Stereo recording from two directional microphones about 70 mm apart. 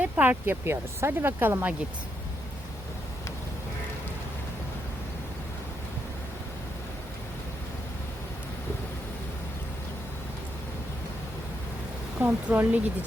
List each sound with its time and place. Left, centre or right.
0.0 s speech: right
12.2 s speech: right